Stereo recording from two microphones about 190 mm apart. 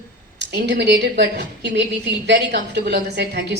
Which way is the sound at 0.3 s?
60° right (ahead or behind).